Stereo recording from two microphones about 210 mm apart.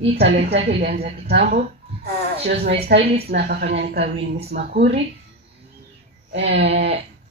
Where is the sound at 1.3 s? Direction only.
50° right (ahead or behind).